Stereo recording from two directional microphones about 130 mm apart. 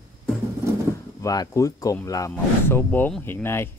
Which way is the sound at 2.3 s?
15° left (ahead or behind).